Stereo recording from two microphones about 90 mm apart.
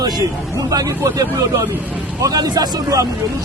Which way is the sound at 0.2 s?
40° right (ahead or behind).